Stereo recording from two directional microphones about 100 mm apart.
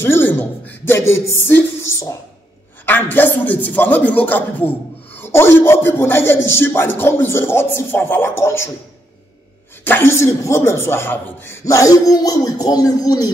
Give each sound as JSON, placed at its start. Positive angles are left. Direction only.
{"t": 0.0, "sound": "a sound", "side_deg": 20}
{"t": 2.8, "sound": "a man's voice", "side_deg": 20}
{"t": 9.8, "sound": "a man's voice", "side_deg": 25}